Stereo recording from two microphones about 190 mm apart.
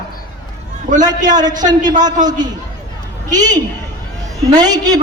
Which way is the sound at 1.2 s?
20° right (ahead or behind).